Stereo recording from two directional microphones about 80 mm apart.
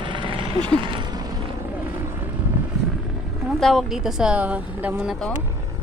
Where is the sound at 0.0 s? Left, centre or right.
Right.